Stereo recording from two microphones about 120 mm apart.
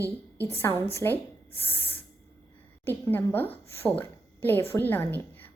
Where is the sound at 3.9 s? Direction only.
15° left (ahead or behind).